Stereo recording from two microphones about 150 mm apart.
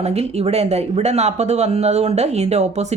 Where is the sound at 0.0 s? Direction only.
45° right (ahead or behind).